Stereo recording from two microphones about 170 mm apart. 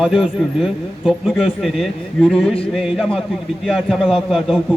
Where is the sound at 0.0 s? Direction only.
Centre (ahead or behind).